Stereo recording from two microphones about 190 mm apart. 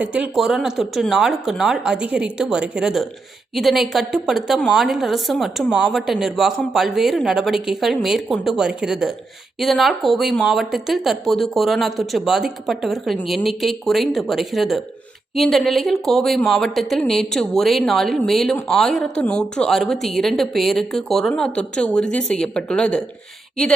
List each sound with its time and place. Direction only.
0.0 s a woman's voice: 5° right (ahead or behind)